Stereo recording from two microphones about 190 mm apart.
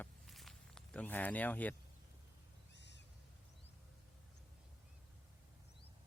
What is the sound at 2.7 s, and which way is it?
Owl, 65° left (ahead or behind).